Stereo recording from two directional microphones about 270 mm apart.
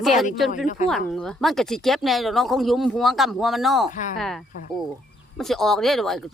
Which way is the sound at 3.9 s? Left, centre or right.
Left.